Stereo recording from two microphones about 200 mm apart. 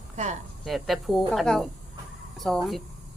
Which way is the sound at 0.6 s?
Centre (ahead or behind).